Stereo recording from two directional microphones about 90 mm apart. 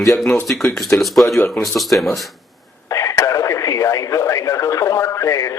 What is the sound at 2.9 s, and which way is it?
Radio, 40° left (ahead or behind).